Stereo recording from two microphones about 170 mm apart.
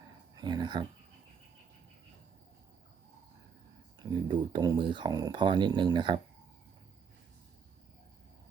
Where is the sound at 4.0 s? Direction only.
25° right (ahead or behind).